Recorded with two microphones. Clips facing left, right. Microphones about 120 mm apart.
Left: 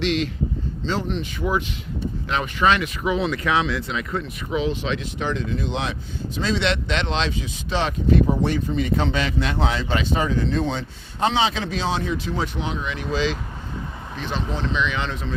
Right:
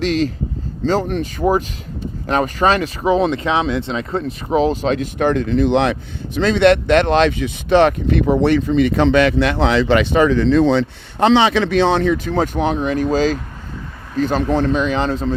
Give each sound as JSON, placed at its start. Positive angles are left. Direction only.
{"t": 0.0, "sound": "speech", "side_deg": -40}